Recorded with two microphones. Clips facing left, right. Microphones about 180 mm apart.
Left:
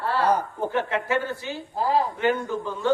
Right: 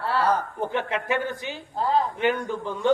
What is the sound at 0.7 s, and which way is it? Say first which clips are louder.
Speech: left 2 dB; 20° right (ahead or behind).